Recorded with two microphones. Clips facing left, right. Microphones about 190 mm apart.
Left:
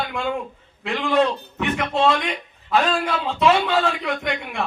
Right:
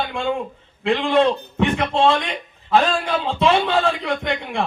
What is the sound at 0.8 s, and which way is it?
A man's voice, 25° right (ahead or behind).